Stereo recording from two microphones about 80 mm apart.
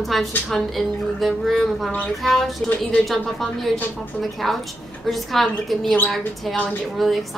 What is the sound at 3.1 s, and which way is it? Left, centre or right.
A woman's voice, centre.